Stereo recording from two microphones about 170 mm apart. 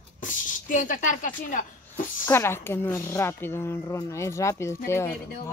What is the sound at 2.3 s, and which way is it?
A woman's voice, 15° left (ahead or behind).